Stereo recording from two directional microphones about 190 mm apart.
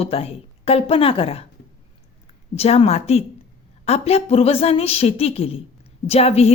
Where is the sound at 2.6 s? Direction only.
35° left (ahead or behind).